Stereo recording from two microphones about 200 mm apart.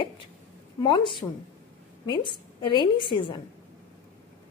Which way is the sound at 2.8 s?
25° left (ahead or behind).